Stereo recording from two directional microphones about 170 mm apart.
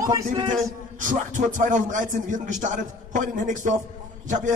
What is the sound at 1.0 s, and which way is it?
Speech, 50° right (ahead or behind).